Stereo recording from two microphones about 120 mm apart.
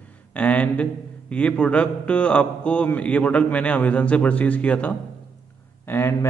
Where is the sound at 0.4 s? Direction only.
10° left (ahead or behind).